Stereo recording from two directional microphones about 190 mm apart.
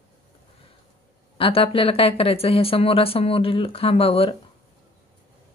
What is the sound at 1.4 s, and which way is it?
Speech, 30° left (ahead or behind).